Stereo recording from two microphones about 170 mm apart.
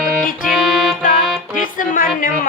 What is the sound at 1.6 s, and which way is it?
Music, 55° left (ahead or behind).